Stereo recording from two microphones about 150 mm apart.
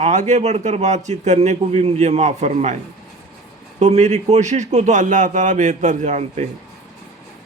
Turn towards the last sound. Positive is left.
turn(degrees=-50)  # may be behind; listen again after turning